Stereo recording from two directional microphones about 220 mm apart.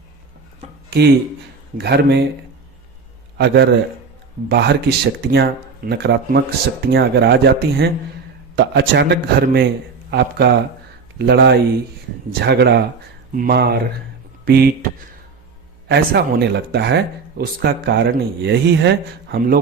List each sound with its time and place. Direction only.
0.9 s a sound: 45° right (ahead or behind)
1.8 s speech: 50° right (ahead or behind)
3.3 s speech: 50° right (ahead or behind)
15.9 s speech: 45° right (ahead or behind)